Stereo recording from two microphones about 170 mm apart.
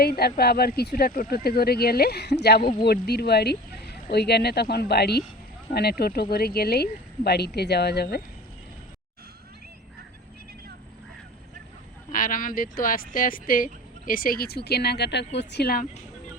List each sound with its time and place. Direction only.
0.0 s speech: 65° left (ahead or behind)
12.1 s speech: 55° left (ahead or behind)